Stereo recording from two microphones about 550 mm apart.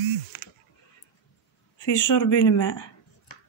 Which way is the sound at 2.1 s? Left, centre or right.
Left.